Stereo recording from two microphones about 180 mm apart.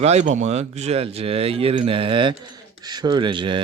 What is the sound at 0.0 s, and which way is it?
Speech, 40° right (ahead or behind).